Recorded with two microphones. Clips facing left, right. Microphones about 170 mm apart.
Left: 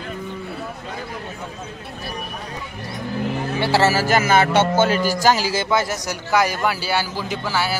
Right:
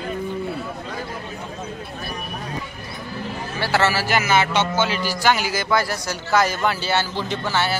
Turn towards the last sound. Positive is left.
turn(degrees=5)  # may be behind; listen again after turning